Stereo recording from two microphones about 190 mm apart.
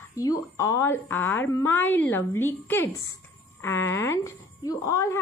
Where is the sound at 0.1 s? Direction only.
15° left (ahead or behind).